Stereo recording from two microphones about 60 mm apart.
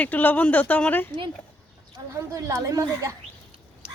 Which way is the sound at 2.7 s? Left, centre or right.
Right.